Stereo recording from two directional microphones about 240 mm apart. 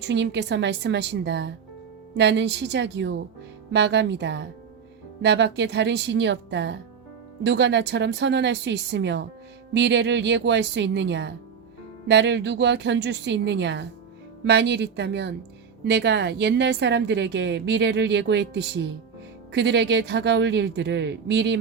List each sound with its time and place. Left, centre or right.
0.1 s a woman's voice: right